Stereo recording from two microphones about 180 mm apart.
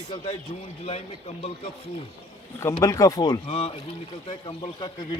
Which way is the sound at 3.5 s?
35° left (ahead or behind).